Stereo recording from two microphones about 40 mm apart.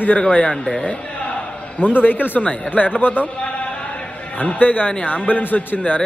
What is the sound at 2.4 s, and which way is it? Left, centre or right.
Speech, left.